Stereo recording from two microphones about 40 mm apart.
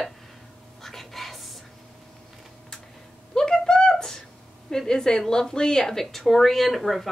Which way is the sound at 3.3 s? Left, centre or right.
Centre.